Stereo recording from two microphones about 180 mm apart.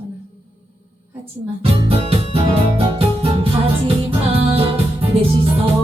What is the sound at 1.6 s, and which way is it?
Music, 30° right (ahead or behind).